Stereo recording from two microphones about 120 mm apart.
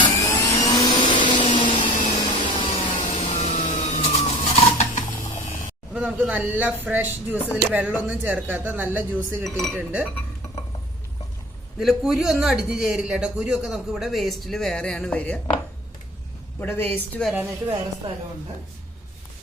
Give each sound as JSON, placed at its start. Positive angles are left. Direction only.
{"t": 0.1, "sound": "vacuum cleaner", "side_deg": 25}
{"t": 1.8, "sound": "vacuum cleaner", "side_deg": 90}
{"t": 2.2, "sound": "a sound", "side_deg": 40}
{"t": 3.0, "sound": "vehicle", "side_deg": 70}
{"t": 5.9, "sound": "speech", "side_deg": -10}
{"t": 9.4, "sound": "a man's voice", "side_deg": 5}
{"t": 9.7, "sound": "speech", "side_deg": -10}
{"t": 11.8, "sound": "a man's voice", "side_deg": 0}
{"t": 16.6, "sound": "a woman's voice", "side_deg": 20}